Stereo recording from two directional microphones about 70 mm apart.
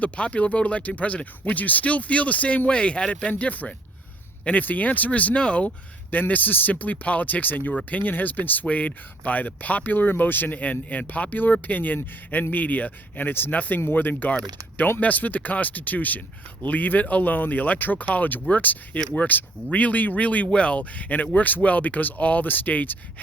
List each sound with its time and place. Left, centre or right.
0.0 s speech: centre